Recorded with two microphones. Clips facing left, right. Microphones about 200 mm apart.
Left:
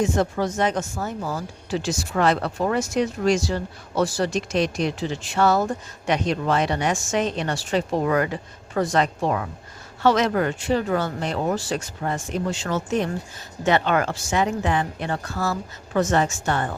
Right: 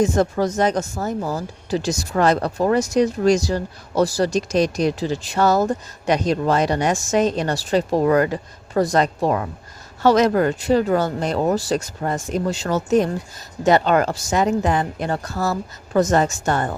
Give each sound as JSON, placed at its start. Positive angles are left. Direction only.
{"t": 0.0, "sound": "speech", "side_deg": -40}